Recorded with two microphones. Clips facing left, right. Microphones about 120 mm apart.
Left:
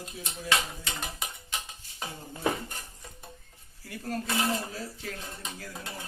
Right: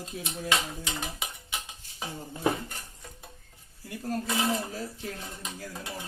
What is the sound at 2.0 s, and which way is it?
Speech, 10° right (ahead or behind).